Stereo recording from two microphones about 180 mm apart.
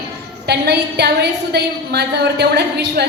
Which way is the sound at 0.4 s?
65° right (ahead or behind).